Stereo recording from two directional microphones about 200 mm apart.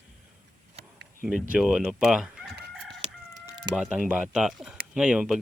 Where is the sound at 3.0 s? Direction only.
35° right (ahead or behind).